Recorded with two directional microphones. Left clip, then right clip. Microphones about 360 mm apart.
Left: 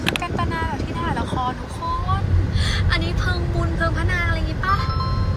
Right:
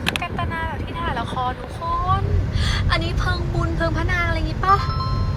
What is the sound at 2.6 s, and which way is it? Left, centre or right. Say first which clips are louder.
Vehicle: right 1 dB; centre.